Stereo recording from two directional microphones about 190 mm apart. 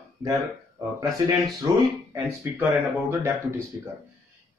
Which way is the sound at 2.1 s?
15° right (ahead or behind).